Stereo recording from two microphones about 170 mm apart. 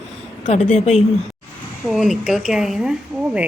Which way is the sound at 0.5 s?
40° left (ahead or behind).